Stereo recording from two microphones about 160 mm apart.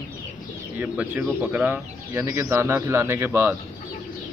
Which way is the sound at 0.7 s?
10° right (ahead or behind).